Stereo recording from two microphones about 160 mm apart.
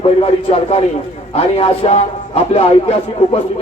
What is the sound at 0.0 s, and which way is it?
Speech, 40° left (ahead or behind).